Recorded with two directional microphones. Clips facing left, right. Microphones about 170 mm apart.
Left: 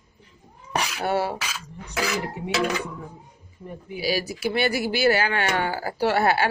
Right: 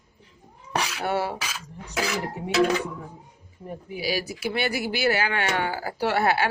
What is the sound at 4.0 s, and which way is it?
Speech, 35° left (ahead or behind).